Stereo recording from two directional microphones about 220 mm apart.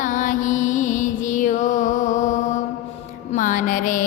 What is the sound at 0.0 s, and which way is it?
Music, 35° left (ahead or behind).